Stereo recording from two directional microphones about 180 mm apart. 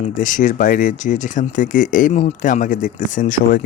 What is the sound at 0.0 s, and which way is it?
Speech, 45° left (ahead or behind).